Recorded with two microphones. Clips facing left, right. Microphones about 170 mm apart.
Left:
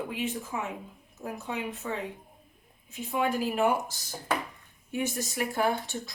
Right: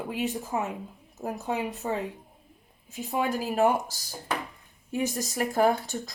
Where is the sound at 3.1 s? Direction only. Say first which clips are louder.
Even; 40° right (ahead or behind).